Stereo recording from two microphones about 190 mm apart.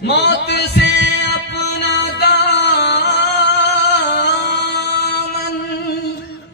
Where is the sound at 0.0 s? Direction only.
60° left (ahead or behind).